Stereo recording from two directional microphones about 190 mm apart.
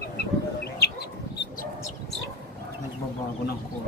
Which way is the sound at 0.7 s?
60° left (ahead or behind).